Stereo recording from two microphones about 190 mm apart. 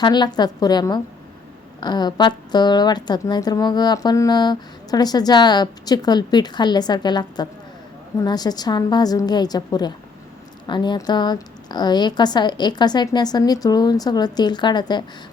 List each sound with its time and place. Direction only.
0.0 s a woman's voice: 20° left (ahead or behind)